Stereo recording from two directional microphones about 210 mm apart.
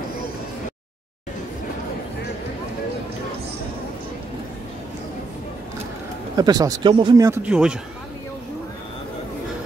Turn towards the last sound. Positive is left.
turn(degrees=-5)  # may be behind; listen again after turning